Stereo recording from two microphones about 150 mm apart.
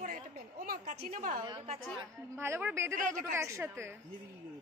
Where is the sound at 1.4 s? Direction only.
35° right (ahead or behind).